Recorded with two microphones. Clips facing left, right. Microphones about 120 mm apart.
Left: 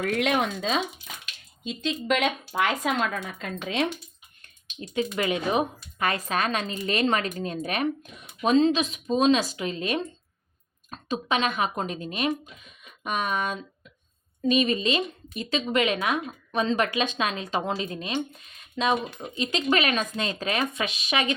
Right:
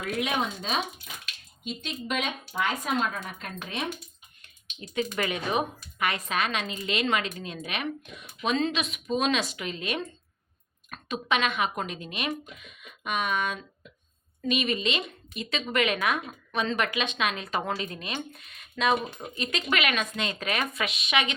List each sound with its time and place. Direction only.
0.0 s speech: 75° left (ahead or behind)
1.9 s speech: 90° left
4.8 s a woman's voice: 25° left (ahead or behind)